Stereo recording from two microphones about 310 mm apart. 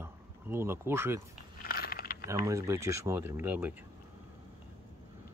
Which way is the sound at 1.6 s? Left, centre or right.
Left.